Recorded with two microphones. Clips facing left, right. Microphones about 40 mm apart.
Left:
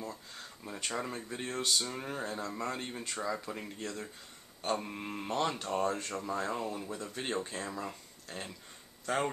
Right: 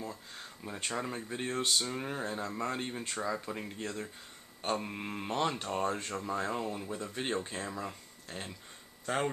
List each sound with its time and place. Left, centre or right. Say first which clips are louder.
0.3 s speech: right 1 dB; centre
1.9 s speech: right 2 dB; centre